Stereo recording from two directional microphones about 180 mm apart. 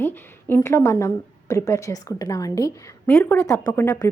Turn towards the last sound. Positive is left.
turn(degrees=10)  # may be behind; listen again after turning